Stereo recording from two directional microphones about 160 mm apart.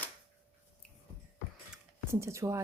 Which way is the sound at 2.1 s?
15° right (ahead or behind).